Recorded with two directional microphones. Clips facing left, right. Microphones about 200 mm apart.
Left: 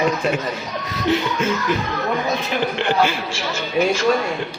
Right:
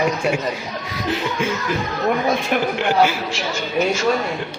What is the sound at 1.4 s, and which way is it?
Speech, 10° right (ahead or behind).